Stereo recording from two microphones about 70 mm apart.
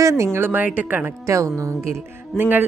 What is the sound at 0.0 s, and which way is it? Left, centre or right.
Speech, right.